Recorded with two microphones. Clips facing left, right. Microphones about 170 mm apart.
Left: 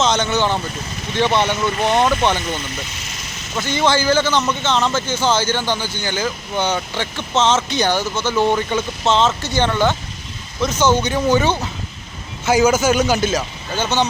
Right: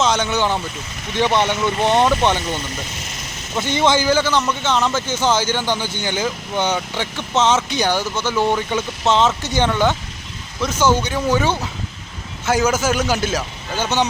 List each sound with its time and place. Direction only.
0.0 s speech: 10° right (ahead or behind)
2.6 s speech: 40° right (ahead or behind)
3.6 s a man's voice: 20° right (ahead or behind)